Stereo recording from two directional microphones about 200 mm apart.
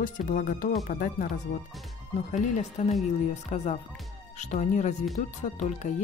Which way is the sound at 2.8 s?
35° left (ahead or behind).